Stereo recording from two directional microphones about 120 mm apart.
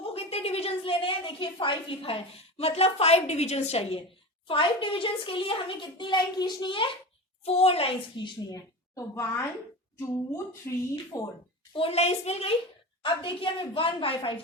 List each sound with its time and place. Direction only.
0.1 s a child's voice: 55° left (ahead or behind)
7.4 s a woman's voice: 55° left (ahead or behind)
8.5 s a woman's voice: 25° left (ahead or behind)
11.8 s a woman's voice: 60° left (ahead or behind)
13.0 s a child's voice: 45° left (ahead or behind)